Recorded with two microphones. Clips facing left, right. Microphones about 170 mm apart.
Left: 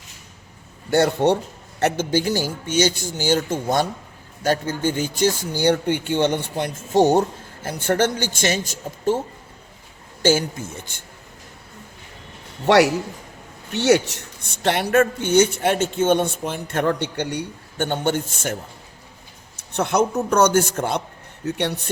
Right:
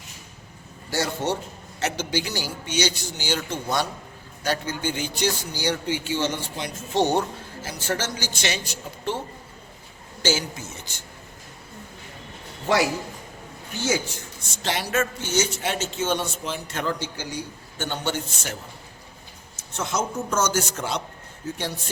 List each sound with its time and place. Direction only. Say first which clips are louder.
0.9 s a woman's voice: left 9 dB; 60° left (ahead or behind)
1.8 s speech: left 7 dB; 50° left (ahead or behind)
10.2 s speech: left 7 dB; 55° left (ahead or behind)
12.6 s a man's voice: left 7 dB; 75° left (ahead or behind); by 18.5 s 50° left (ahead or behind)
19.5 s a woman's voice: left 8 dB; 60° left (ahead or behind)
21.4 s a woman's voice: left 7 dB; 65° left (ahead or behind)